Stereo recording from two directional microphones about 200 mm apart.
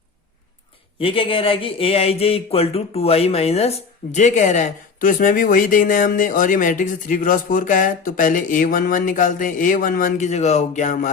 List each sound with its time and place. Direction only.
0.9 s speech: 25° left (ahead or behind)